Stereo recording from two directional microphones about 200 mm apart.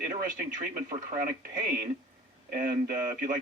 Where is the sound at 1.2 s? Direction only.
45° right (ahead or behind).